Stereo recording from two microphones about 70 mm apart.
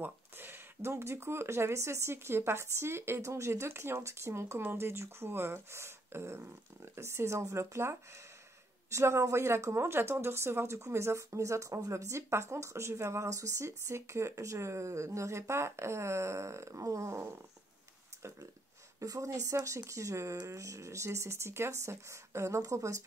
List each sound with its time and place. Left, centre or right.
0.0 s speech: right
18.9 s speech: right